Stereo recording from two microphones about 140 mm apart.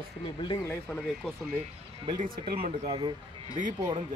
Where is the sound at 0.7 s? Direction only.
5° left (ahead or behind).